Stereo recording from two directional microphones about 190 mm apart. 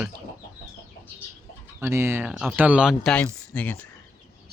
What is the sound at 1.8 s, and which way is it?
Speech, 15° right (ahead or behind).